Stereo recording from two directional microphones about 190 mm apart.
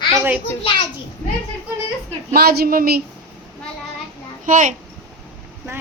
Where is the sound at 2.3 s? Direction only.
55° right (ahead or behind).